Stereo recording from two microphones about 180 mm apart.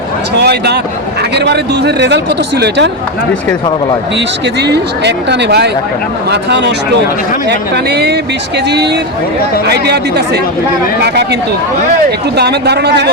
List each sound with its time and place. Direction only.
0.3 s speech: 65° right (ahead or behind)
4.6 s speech: 70° right (ahead or behind)
7.9 s speech: 65° right (ahead or behind)
9.6 s speech: 65° right (ahead or behind)
12.4 s speech: 65° right (ahead or behind)